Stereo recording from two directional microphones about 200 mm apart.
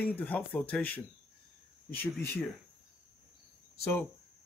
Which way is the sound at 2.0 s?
10° left (ahead or behind).